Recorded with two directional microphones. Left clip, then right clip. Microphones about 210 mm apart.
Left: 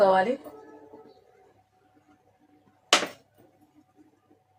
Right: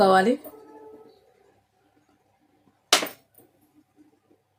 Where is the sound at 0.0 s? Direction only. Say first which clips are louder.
Right 2 dB; 55° right (ahead or behind).